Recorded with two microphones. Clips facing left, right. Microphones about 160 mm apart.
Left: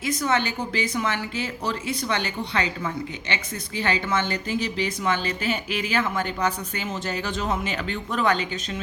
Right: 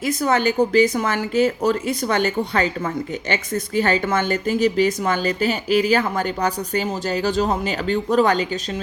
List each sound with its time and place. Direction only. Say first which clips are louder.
0.2 s a woman's voice: right 9 dB; 40° right (ahead or behind)